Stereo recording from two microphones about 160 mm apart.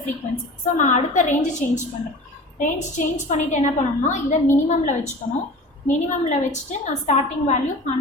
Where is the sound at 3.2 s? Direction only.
50° left (ahead or behind).